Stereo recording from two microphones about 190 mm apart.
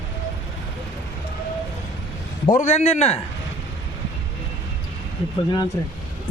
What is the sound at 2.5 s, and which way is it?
Speech, 35° left (ahead or behind).